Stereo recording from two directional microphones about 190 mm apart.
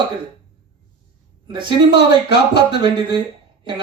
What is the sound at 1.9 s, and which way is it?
Speech, 60° left (ahead or behind).